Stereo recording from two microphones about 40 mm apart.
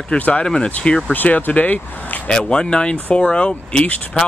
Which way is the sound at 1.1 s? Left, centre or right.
Left.